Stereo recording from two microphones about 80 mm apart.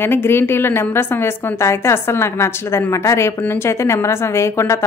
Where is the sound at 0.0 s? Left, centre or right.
Left.